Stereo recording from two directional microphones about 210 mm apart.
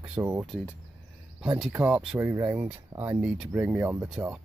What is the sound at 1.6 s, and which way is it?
Speech, 5° right (ahead or behind).